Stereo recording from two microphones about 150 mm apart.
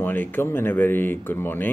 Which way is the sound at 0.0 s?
15° left (ahead or behind).